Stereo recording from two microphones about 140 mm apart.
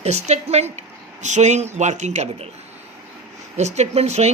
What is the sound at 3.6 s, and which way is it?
Speech, 55° right (ahead or behind).